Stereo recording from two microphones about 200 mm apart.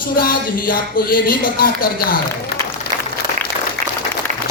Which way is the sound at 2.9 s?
40° right (ahead or behind).